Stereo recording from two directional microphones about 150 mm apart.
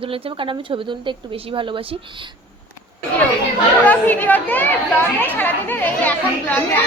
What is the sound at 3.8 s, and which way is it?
Speech, 10° left (ahead or behind).